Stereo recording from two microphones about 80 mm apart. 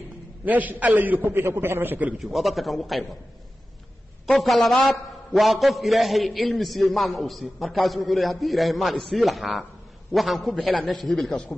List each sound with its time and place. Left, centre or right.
0.5 s a man's voice: right
2.1 s a man's voice: centre
4.4 s a man's voice: centre